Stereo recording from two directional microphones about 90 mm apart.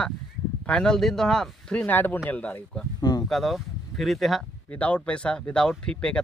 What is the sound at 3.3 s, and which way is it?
Speech, centre (ahead or behind).